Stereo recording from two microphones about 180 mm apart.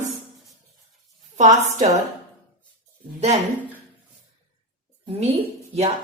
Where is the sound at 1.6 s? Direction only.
40° right (ahead or behind).